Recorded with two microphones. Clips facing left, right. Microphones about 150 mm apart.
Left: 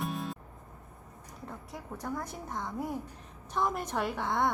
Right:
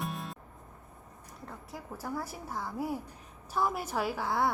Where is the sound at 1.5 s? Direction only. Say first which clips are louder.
Left 1 dB; centre (ahead or behind).